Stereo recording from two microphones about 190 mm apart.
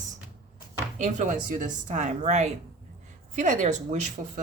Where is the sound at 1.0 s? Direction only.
40° right (ahead or behind).